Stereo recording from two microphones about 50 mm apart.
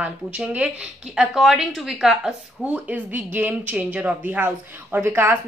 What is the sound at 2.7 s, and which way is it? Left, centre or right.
A woman's voice, right.